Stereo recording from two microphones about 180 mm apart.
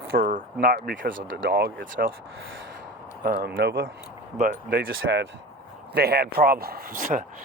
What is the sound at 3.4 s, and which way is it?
Speech, 60° right (ahead or behind).